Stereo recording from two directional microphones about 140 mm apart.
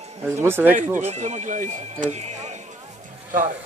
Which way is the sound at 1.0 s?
55° right (ahead or behind).